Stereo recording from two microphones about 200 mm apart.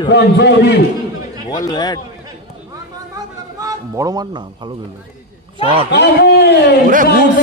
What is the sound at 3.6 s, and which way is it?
Bleat, 15° right (ahead or behind).